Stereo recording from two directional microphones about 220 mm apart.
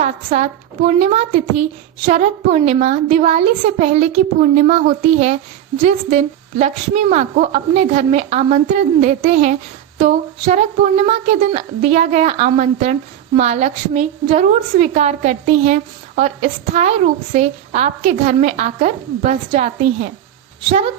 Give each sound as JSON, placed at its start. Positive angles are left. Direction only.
{"t": 0.0, "sound": "speech", "side_deg": -30}